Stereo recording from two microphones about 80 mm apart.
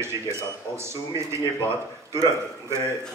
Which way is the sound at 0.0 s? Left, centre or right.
Right.